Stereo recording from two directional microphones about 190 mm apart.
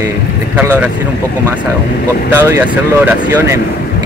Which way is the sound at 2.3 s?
10° right (ahead or behind).